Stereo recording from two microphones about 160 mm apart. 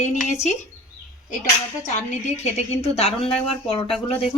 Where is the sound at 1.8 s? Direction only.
45° left (ahead or behind).